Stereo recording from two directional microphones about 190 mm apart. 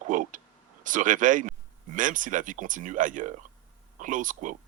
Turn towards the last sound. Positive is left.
turn(degrees=-45)  # may be behind; listen again after turning